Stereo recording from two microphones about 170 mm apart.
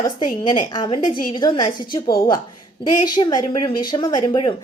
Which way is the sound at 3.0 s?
25° left (ahead or behind).